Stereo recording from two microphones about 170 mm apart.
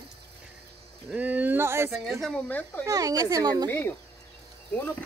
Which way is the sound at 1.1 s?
10° right (ahead or behind).